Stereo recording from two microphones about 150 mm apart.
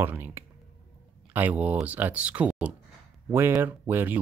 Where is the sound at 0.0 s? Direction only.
15° right (ahead or behind).